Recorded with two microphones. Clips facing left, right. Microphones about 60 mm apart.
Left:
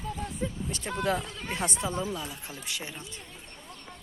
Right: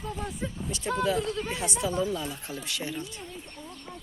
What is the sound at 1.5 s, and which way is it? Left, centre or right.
Speech, left.